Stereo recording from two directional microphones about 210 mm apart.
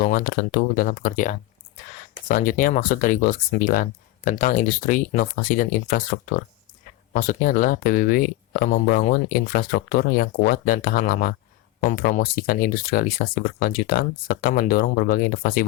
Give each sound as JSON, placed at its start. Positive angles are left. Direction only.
{"t": 0.0, "sound": "speech", "side_deg": 40}